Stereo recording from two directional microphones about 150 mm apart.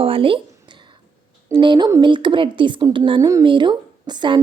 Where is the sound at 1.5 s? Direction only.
30° right (ahead or behind).